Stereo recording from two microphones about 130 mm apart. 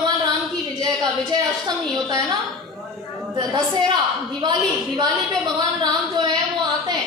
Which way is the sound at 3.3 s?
35° right (ahead or behind).